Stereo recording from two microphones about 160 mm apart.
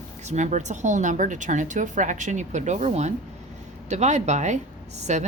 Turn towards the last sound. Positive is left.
turn(degrees=-45)  # may be behind; listen again after turning